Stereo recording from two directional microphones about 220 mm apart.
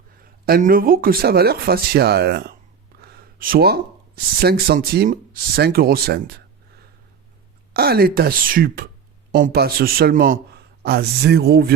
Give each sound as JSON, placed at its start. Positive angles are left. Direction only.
{"t": 0.4, "sound": "speech", "side_deg": -40}
{"t": 7.7, "sound": "a man's voice", "side_deg": -45}